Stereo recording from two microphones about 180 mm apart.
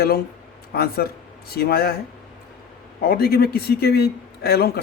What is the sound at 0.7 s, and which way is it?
Speech, 60° left (ahead or behind).